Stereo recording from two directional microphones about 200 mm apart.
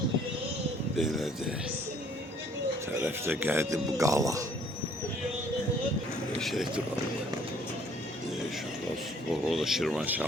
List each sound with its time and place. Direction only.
0.9 s speech: centre (ahead or behind)
2.9 s a man's voice: 10° right (ahead or behind)
6.4 s speech: centre (ahead or behind)
9.5 s speech: centre (ahead or behind)